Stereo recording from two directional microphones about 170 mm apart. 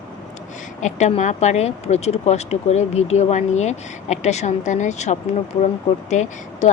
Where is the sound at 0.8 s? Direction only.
45° left (ahead or behind).